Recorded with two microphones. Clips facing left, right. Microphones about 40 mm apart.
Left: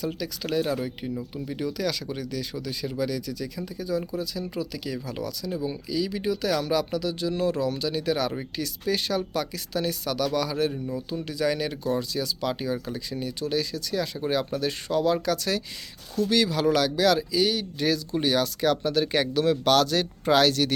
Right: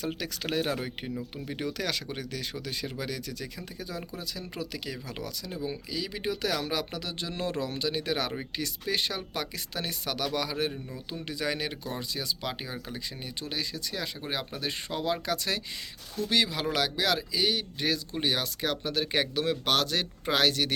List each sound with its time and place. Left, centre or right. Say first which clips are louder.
0.1 s speech: left 3 dB; right
5.9 s speech: left 8 dB; right